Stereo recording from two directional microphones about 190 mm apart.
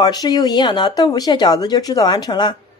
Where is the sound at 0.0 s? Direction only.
20° left (ahead or behind).